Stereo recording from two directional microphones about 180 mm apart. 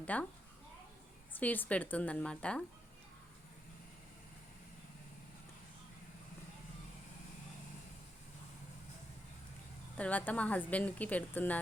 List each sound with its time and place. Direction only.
0.0 s speech: 10° left (ahead or behind)
1.4 s a woman's voice: 10° left (ahead or behind)
10.0 s a woman's voice: 10° left (ahead or behind)